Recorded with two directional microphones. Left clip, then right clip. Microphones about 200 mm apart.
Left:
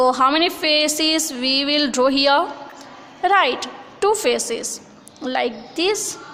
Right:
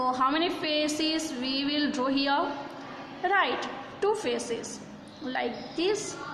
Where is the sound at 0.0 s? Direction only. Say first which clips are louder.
Left 10 dB; 50° left (ahead or behind).